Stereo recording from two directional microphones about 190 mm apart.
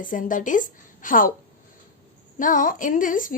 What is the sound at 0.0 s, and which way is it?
A woman's voice, 45° left (ahead or behind).